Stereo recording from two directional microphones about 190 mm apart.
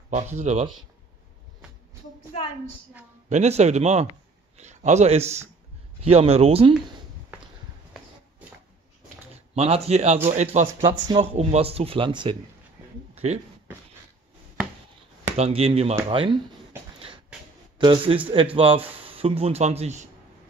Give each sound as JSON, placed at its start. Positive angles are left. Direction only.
{"t": 0.1, "sound": "speech", "side_deg": -40}
{"t": 3.3, "sound": "speech", "side_deg": -35}
{"t": 9.6, "sound": "speech", "side_deg": -35}
{"t": 13.1, "sound": "a sound", "side_deg": -30}
{"t": 15.3, "sound": "speech", "side_deg": -35}
{"t": 17.7, "sound": "a man's voice", "side_deg": -25}